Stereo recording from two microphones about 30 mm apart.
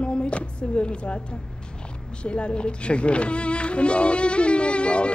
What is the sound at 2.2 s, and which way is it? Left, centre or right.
Music, left.